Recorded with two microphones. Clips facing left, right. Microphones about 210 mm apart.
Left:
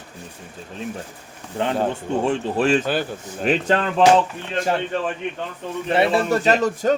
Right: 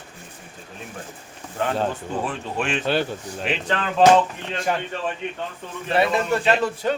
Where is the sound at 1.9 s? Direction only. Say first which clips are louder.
Left 6 dB; 25° left (ahead or behind); by 3.8 s 45° left (ahead or behind).